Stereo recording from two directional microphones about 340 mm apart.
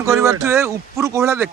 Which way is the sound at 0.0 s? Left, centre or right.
Centre.